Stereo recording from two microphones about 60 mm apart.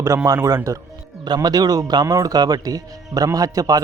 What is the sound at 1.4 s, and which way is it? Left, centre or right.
A man's voice, right.